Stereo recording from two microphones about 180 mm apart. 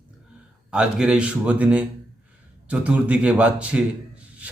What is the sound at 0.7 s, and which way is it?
A man's voice, 5° right (ahead or behind).